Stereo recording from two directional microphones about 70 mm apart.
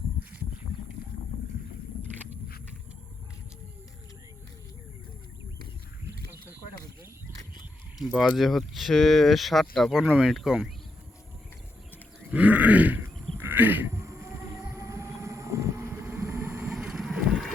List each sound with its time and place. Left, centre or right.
6.2 s wild animals: right
7.9 s speech: centre
12.3 s grunt: right
13.4 s a sound: right
14.0 s vehicle: right
15.9 s vehicle: right
16.7 s vehicle: centre